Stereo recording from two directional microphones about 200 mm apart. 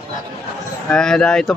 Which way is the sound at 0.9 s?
5° left (ahead or behind).